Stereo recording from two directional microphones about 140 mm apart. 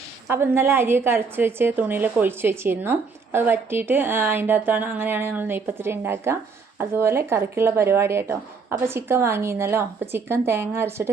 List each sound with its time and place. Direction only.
0.3 s a woman's voice: 15° right (ahead or behind)